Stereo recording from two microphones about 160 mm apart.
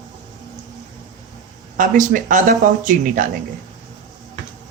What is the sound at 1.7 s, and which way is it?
Speech, 55° right (ahead or behind).